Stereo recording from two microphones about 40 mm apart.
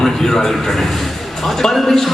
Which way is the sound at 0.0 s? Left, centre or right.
Centre.